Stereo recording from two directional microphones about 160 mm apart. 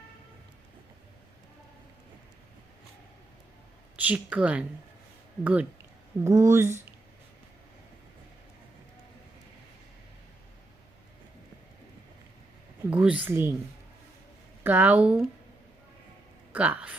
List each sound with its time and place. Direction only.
3.9 s speech: 10° right (ahead or behind)
12.9 s speech: 10° right (ahead or behind)
14.6 s speech: 10° right (ahead or behind)
16.5 s speech: 10° right (ahead or behind)